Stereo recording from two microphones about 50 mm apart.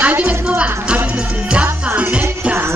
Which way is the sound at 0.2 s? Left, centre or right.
Right.